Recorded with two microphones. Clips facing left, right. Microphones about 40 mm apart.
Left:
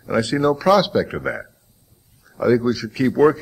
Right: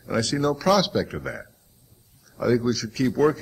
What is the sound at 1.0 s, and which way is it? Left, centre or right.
Speech, left.